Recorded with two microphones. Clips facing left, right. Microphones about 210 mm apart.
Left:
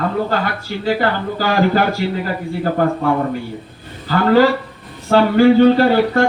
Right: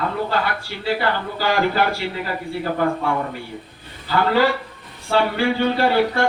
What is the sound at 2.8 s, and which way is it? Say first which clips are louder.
Speech: left 4 dB; 45° left (ahead or behind).